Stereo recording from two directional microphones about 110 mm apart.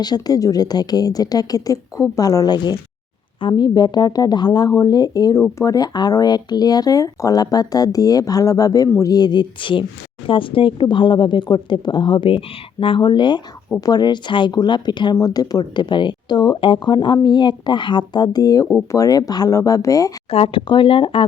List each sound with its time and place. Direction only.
0.0 s speech: 35° left (ahead or behind)
20.3 s speech: 55° left (ahead or behind)